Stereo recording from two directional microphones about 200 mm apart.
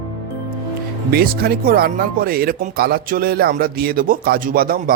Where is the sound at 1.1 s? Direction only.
50° right (ahead or behind).